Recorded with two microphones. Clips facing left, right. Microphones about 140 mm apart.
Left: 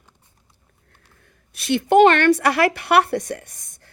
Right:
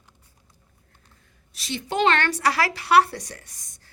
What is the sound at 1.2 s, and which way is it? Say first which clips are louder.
A woman's voice: left 4 dB; 60° left (ahead or behind).